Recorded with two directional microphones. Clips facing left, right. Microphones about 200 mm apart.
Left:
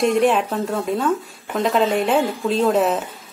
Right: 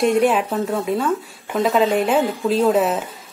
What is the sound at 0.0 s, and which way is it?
Speech, centre (ahead or behind).